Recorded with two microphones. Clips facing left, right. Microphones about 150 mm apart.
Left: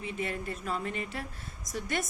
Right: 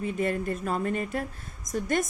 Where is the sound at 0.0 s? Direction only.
45° right (ahead or behind).